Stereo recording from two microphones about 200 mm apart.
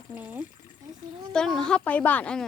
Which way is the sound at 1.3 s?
5° left (ahead or behind).